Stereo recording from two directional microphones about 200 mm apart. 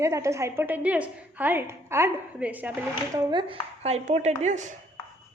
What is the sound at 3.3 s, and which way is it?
Speech, 25° right (ahead or behind).